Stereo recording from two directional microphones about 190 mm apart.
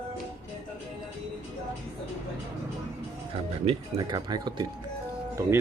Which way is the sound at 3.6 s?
25° right (ahead or behind).